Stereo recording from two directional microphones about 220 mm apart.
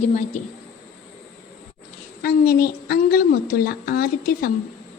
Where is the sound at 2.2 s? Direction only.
45° left (ahead or behind).